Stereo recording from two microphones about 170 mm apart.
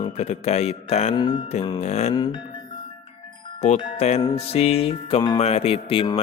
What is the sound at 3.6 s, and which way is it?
Speech, 40° left (ahead or behind).